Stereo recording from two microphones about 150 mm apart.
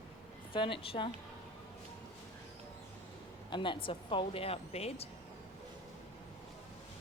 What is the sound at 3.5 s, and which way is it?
Speech, 35° left (ahead or behind).